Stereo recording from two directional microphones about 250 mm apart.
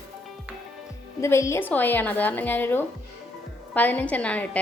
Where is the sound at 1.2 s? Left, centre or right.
Centre.